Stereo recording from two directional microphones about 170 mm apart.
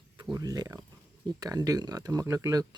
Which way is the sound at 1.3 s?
20° right (ahead or behind).